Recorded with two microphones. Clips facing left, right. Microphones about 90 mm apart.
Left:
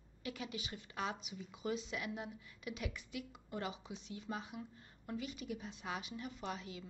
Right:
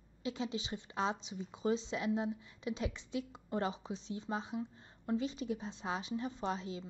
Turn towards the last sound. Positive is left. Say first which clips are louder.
# right 6 dB
turn(degrees=-30)  # may be behind; listen again after turning